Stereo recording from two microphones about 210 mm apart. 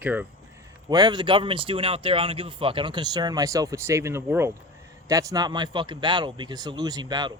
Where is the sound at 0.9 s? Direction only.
20° right (ahead or behind).